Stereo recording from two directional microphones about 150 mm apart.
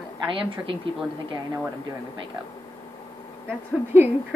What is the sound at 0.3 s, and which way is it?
Speech, 35° right (ahead or behind).